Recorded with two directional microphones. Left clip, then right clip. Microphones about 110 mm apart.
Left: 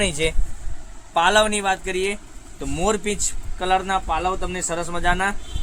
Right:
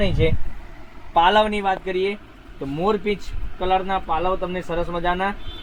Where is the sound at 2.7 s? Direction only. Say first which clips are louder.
Right 1 dB; 5° right (ahead or behind).